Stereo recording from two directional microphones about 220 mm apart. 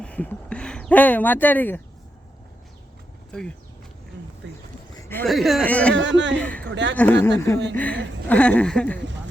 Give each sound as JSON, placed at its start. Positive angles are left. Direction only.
{"t": 0.0, "sound": "speech", "side_deg": 5}
{"t": 4.9, "sound": "speech", "side_deg": 10}
{"t": 5.9, "sound": "speech", "side_deg": -55}
{"t": 6.3, "sound": "speech", "side_deg": 5}
{"t": 6.7, "sound": "speech", "side_deg": -55}
{"t": 6.9, "sound": "speech", "side_deg": 10}